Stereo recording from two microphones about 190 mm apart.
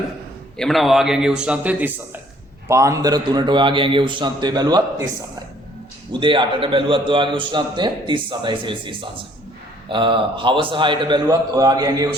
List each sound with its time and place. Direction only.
0.5 s a man's voice: centre (ahead or behind); by 5.0 s 20° right (ahead or behind)
6.1 s a man's voice: 25° right (ahead or behind)